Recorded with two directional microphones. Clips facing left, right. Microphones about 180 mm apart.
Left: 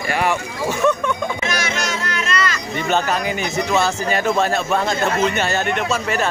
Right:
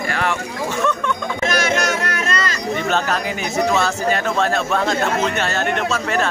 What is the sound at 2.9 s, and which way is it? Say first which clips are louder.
Speech: left 1 dB; centre (ahead or behind).